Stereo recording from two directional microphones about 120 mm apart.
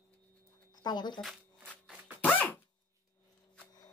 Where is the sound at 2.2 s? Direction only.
15° left (ahead or behind).